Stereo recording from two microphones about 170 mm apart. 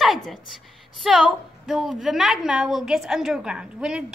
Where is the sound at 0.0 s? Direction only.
Centre (ahead or behind).